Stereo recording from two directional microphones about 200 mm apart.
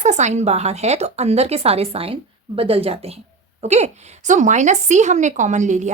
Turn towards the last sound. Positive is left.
turn(degrees=-35)  # may be behind; listen again after turning